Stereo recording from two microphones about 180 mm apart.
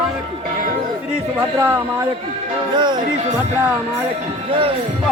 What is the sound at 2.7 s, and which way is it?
Speech, 25° right (ahead or behind).